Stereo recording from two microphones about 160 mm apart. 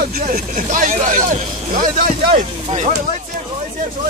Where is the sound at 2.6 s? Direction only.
50° right (ahead or behind).